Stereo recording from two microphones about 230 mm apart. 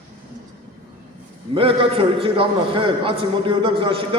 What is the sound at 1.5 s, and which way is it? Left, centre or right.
A man's voice, right.